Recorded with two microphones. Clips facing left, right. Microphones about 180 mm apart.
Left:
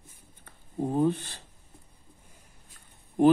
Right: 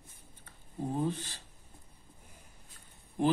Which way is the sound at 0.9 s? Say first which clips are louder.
Left 9 dB; 60° left (ahead or behind).